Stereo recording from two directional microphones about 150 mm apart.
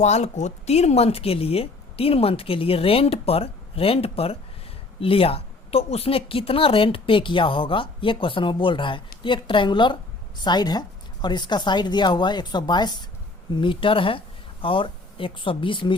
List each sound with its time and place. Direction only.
0.0 s a woman's voice: 50° left (ahead or behind)